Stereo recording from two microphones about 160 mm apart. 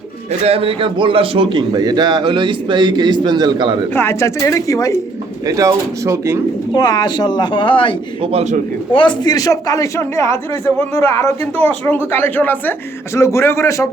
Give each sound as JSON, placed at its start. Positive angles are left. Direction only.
{"t": 0.4, "sound": "a man's voice", "side_deg": -35}
{"t": 3.9, "sound": "a man's voice", "side_deg": 15}
{"t": 5.5, "sound": "a man's voice", "side_deg": -20}
{"t": 6.7, "sound": "a man's voice", "side_deg": 25}
{"t": 8.2, "sound": "a man's voice", "side_deg": -40}
{"t": 8.9, "sound": "a man's voice", "side_deg": 30}